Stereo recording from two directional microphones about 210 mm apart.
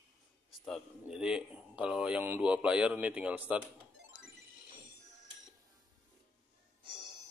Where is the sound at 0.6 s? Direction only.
Centre (ahead or behind).